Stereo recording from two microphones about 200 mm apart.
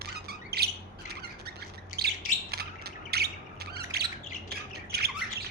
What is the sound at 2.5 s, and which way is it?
Squawk, 50° right (ahead or behind).